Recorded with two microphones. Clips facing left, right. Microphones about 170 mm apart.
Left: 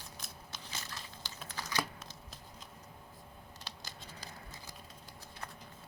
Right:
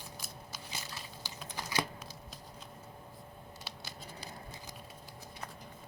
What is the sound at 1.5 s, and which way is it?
Computer keyboard, 15° right (ahead or behind).